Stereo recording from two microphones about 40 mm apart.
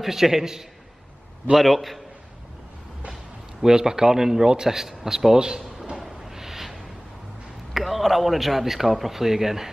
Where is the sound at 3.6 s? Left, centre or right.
Centre.